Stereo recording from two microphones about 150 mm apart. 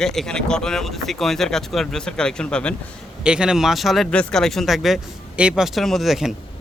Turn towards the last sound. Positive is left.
turn(degrees=0)  # may be behind; listen again after turning